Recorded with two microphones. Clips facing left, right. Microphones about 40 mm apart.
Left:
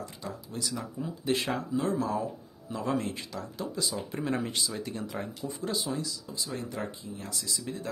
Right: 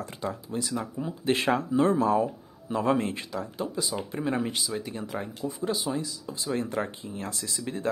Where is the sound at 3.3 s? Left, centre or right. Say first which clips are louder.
Right 4 dB; centre.